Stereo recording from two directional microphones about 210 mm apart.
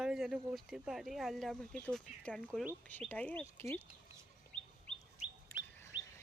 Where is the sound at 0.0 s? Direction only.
5° right (ahead or behind).